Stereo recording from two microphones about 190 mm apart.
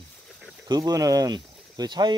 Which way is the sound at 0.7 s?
20° right (ahead or behind).